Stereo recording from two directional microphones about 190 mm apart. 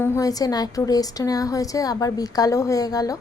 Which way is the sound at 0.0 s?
15° left (ahead or behind).